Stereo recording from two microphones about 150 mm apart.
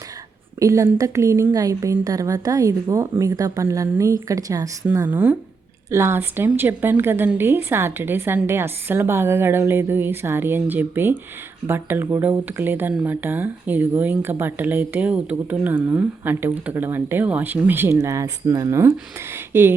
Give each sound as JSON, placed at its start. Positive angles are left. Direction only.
{"t": 0.6, "sound": "a woman's voice", "side_deg": -20}
{"t": 5.0, "sound": "speech", "side_deg": -10}